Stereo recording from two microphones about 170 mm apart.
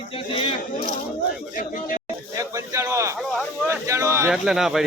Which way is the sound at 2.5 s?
15° right (ahead or behind).